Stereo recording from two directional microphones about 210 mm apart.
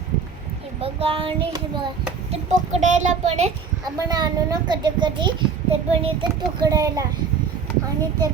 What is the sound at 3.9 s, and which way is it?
Child singing, 20° right (ahead or behind).